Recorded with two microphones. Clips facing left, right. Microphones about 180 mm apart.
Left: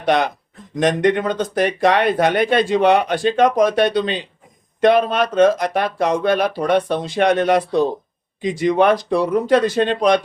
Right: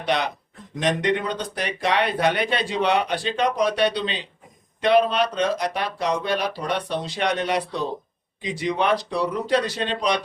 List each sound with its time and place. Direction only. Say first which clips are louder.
0.0 s speech: left 6 dB; 50° left (ahead or behind)